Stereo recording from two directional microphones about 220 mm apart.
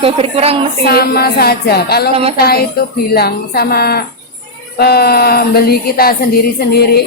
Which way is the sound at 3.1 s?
45° left (ahead or behind).